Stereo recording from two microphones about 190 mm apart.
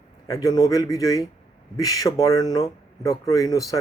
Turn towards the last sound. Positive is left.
turn(degrees=15)  # may be behind; listen again after turning